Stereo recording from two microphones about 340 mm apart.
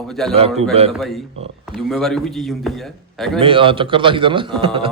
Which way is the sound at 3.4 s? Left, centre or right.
Centre.